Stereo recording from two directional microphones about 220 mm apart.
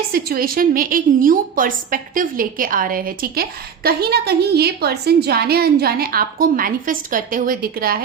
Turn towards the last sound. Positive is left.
turn(degrees=-45)  # may be behind; listen again after turning